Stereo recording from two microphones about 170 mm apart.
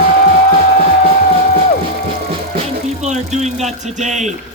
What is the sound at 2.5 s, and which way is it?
A man's voice, 40° right (ahead or behind).